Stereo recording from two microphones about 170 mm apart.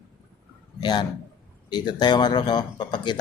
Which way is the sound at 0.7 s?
25° left (ahead or behind).